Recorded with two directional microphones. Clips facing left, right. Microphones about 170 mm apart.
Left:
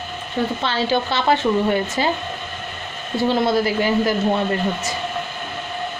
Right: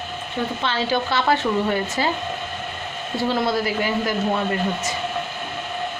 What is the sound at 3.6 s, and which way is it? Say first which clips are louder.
Speech: left 4 dB; 30° left (ahead or behind).